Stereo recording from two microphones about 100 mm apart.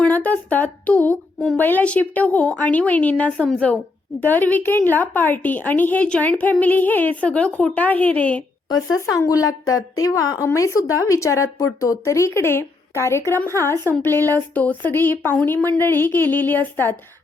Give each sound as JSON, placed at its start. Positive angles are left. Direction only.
{"t": 0.0, "sound": "a woman's voice", "side_deg": 15}
{"t": 9.0, "sound": "a woman's voice", "side_deg": 35}